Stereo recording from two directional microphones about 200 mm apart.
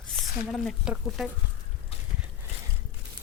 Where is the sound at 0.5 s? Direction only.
Centre (ahead or behind).